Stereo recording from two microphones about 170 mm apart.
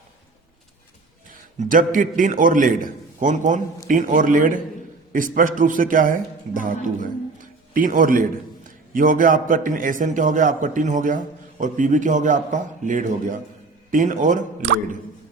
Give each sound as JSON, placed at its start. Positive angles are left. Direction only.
{"t": 1.3, "sound": "a man's voice", "side_deg": -50}